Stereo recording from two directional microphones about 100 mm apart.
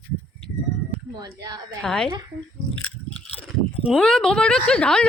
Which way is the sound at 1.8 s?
5° left (ahead or behind).